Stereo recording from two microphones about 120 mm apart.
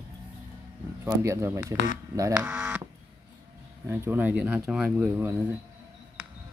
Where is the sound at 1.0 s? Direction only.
25° right (ahead or behind).